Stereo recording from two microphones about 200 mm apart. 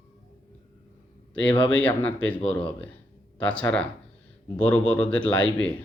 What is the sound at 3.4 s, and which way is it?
Speech, 5° left (ahead or behind).